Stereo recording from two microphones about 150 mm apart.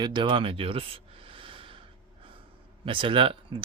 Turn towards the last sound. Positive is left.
turn(degrees=-35)  # may be behind; listen again after turning